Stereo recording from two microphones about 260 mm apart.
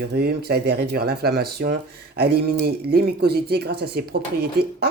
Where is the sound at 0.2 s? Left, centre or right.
Right.